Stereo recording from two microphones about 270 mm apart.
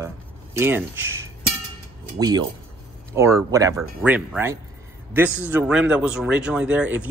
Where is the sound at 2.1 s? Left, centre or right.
Centre.